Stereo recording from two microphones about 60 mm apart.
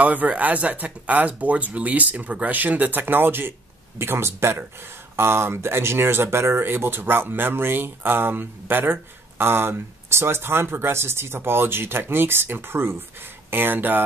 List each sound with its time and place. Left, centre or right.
0.0 s speech: right